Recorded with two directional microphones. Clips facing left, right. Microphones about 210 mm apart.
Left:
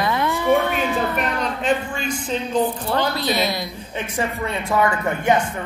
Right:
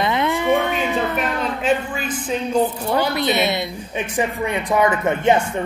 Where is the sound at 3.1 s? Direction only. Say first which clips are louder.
Right 3 dB; 25° right (ahead or behind).